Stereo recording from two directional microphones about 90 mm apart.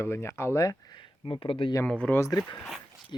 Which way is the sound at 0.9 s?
65° left (ahead or behind).